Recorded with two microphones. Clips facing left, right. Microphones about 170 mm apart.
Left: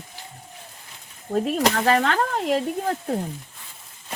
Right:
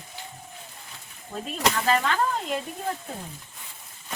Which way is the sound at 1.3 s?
60° left (ahead or behind).